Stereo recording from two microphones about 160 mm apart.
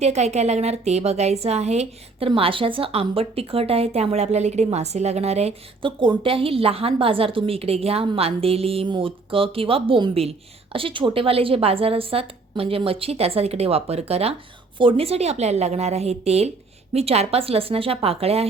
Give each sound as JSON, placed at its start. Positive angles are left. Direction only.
{"t": 0.0, "sound": "a woman's voice", "side_deg": -45}